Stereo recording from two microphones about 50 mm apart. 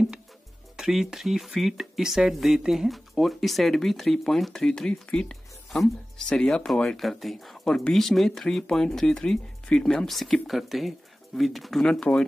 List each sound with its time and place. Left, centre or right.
0.7 s speech: centre
7.0 s speech: centre
11.9 s speech: centre